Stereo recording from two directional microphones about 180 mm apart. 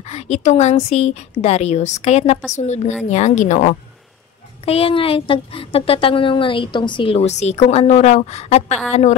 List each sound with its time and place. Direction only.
0.1 s a woman's voice: 40° left (ahead or behind)
4.6 s a woman's voice: 30° left (ahead or behind)